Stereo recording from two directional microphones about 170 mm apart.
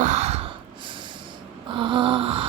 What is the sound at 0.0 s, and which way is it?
Gasp, 40° right (ahead or behind).